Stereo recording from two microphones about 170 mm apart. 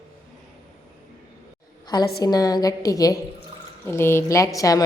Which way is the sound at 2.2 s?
20° left (ahead or behind).